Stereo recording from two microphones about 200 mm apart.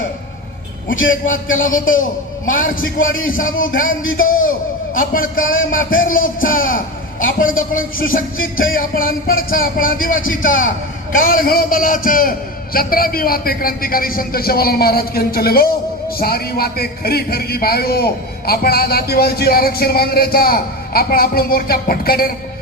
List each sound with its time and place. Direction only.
1.0 s a man's voice: 40° left (ahead or behind)
4.9 s a man's voice: 45° left (ahead or behind)